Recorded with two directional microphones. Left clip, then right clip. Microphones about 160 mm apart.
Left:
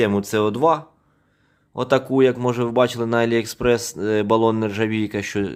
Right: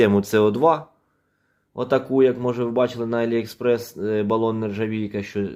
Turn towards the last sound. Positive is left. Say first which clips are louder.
# left 3 dB
turn(degrees=40)  # may be behind; listen again after turning